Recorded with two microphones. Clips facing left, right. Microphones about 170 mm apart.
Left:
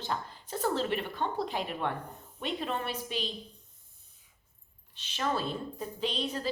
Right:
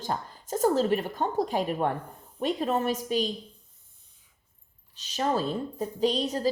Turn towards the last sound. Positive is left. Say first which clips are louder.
# right 7 dB
turn(degrees=-40)  # may be behind; listen again after turning